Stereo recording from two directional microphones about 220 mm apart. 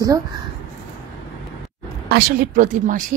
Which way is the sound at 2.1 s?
35° right (ahead or behind).